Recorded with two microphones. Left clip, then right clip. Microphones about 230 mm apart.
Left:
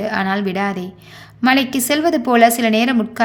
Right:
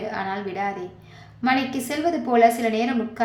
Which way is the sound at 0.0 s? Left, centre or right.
Left.